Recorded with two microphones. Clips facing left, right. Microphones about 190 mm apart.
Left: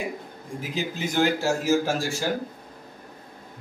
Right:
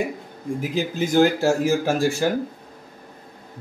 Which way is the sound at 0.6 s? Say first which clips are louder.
Right 5 dB; 50° right (ahead or behind).